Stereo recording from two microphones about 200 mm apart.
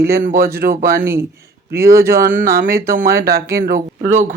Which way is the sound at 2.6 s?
15° right (ahead or behind).